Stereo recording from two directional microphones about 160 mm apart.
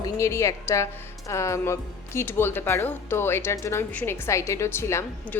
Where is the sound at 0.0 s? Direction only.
15° left (ahead or behind).